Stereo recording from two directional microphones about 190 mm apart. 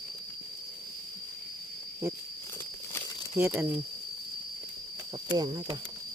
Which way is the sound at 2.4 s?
15° left (ahead or behind).